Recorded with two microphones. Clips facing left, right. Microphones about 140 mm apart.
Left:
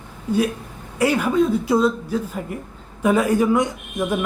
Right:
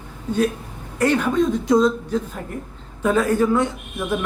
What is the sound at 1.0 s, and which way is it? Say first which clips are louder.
Speech: even; 10° left (ahead or behind).